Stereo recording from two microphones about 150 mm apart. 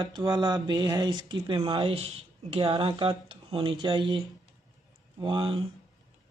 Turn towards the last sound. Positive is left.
turn(degrees=-35)  # may be behind; listen again after turning